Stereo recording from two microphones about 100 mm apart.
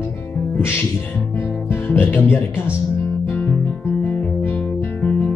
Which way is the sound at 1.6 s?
20° left (ahead or behind).